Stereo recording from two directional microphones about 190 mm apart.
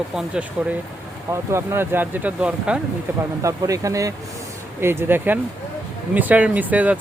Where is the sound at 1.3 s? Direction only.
15° right (ahead or behind).